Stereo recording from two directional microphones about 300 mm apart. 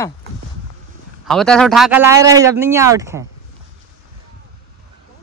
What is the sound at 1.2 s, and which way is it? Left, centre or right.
A man's voice, centre.